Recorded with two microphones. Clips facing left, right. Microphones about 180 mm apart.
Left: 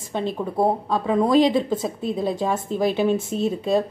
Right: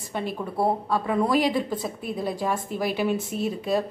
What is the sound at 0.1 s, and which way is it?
A woman's voice, 25° left (ahead or behind).